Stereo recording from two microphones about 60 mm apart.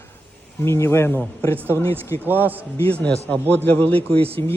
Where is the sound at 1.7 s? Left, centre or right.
Left.